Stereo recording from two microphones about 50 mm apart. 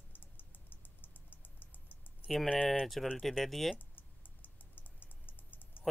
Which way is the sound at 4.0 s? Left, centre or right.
Left.